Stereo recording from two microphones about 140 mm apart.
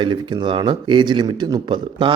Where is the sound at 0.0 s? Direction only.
35° right (ahead or behind).